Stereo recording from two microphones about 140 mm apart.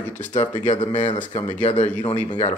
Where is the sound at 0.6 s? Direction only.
60° left (ahead or behind).